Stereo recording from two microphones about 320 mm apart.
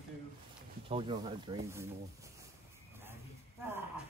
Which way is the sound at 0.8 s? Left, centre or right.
Centre.